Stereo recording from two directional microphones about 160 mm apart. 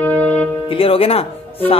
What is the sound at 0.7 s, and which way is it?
Speech, 35° left (ahead or behind).